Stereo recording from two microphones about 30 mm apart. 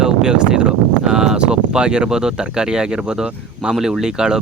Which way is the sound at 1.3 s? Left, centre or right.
Right.